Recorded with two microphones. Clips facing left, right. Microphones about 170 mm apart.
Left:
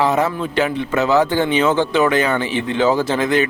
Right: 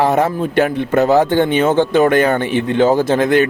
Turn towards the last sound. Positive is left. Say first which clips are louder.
# right 4 dB
turn(degrees=-55)  # may be behind; listen again after turning